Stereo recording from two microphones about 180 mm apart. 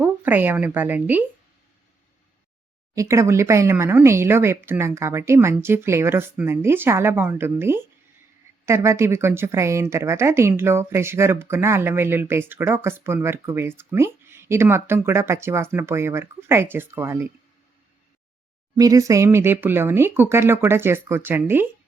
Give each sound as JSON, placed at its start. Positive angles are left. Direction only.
{"t": 0.0, "sound": "a woman's voice", "side_deg": -10}
{"t": 2.9, "sound": "speech", "side_deg": -15}
{"t": 18.8, "sound": "speech", "side_deg": -20}